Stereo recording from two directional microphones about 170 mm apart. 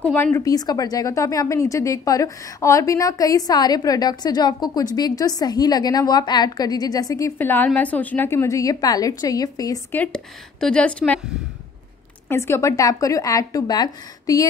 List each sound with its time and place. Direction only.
0.0 s a woman's voice: 10° left (ahead or behind)
9.9 s speech: 5° left (ahead or behind)
12.3 s a woman's voice: 15° left (ahead or behind)